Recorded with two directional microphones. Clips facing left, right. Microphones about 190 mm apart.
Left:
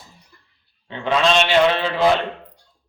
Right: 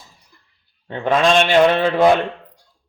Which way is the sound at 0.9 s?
50° right (ahead or behind).